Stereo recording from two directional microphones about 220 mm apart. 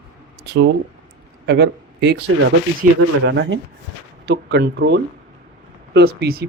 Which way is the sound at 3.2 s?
55° right (ahead or behind).